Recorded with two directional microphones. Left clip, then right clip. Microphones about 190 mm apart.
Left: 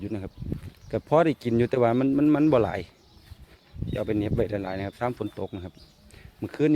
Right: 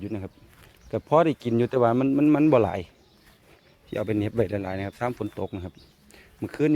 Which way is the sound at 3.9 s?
30° right (ahead or behind).